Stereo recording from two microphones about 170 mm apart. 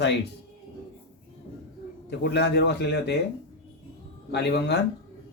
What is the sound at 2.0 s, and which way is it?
Speech, 85° left.